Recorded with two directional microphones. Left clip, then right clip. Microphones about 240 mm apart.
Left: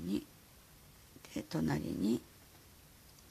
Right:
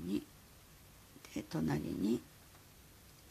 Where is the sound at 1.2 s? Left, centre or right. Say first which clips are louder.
Left 2 dB; centre.